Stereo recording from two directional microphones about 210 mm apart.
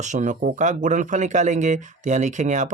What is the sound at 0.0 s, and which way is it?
Speech, 35° right (ahead or behind).